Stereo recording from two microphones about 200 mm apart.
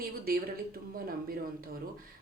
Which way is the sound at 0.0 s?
50° right (ahead or behind).